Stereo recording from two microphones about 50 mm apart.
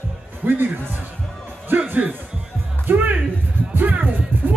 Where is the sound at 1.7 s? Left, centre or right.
Right.